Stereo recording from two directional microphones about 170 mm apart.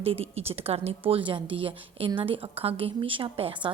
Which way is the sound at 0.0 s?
35° right (ahead or behind).